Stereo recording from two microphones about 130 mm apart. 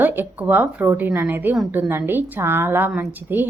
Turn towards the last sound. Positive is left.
turn(degrees=-15)  # may be behind; listen again after turning